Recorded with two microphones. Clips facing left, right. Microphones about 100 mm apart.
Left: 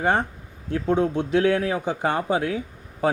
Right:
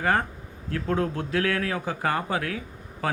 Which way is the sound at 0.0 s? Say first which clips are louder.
Left 2 dB; 25° left (ahead or behind).